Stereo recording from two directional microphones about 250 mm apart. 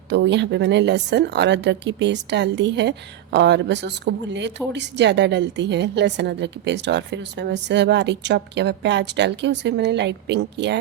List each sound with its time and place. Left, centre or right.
0.1 s speech: right